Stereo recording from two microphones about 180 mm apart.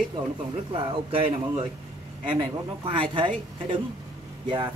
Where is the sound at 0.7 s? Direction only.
30° right (ahead or behind).